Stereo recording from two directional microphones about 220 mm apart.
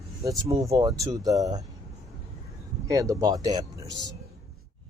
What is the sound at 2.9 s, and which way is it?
Speech, 15° right (ahead or behind).